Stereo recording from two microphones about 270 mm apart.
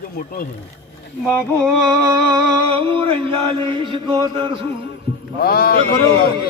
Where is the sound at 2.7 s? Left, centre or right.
Centre.